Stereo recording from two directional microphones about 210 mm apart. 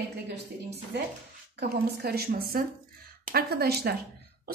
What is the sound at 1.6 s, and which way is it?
A woman's voice, 45° right (ahead or behind).